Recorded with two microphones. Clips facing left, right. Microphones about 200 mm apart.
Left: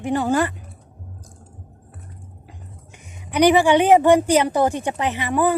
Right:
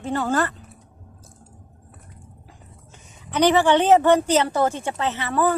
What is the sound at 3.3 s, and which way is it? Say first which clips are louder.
A woman's voice: left 2 dB; 10° left (ahead or behind).